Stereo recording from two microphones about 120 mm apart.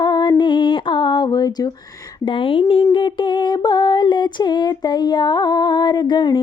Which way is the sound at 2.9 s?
40° left (ahead or behind).